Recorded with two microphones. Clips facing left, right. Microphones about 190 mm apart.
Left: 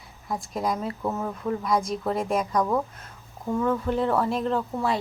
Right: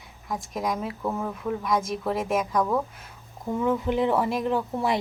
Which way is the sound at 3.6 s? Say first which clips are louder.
Right 1 dB; 15° right (ahead or behind).